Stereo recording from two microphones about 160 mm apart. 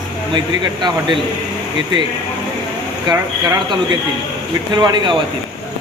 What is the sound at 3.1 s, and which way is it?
Speech, 25° right (ahead or behind).